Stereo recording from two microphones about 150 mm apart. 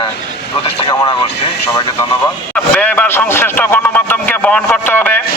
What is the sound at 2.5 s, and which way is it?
Speech, 10° left (ahead or behind).